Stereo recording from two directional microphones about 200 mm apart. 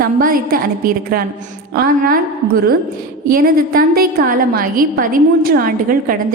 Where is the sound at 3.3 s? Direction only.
45° right (ahead or behind).